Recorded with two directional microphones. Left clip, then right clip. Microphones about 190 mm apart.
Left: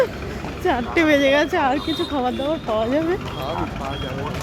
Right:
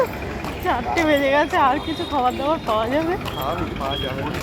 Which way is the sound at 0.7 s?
45° left (ahead or behind).